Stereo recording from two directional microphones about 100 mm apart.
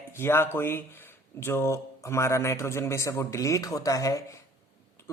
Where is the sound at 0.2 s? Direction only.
25° left (ahead or behind).